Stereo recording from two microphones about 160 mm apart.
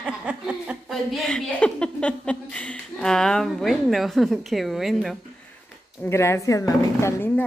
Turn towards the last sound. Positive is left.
turn(degrees=15)  # may be behind; listen again after turning